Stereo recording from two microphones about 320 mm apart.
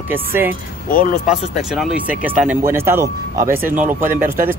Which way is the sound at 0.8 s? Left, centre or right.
Left.